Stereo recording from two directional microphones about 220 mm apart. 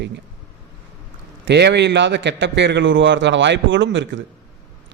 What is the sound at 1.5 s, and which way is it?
A man's voice, 50° right (ahead or behind).